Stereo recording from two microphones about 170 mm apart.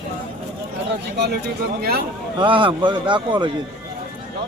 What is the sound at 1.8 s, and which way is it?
Speech, 70° right (ahead or behind).